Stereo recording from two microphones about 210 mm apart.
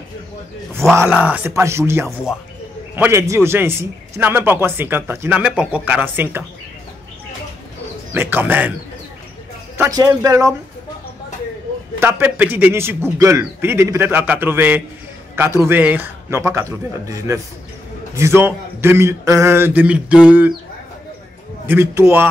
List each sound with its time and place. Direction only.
0.9 s speech: 10° right (ahead or behind)
8.1 s speech: 10° right (ahead or behind)
9.8 s speech: 15° right (ahead or behind)
12.0 s speech: 10° right (ahead or behind)
21.6 s speech: 10° right (ahead or behind)